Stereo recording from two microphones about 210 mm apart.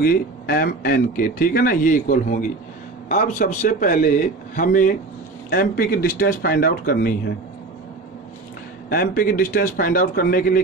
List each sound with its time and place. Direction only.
0.0 s a man's voice: 45° left (ahead or behind)
8.8 s speech: 45° left (ahead or behind)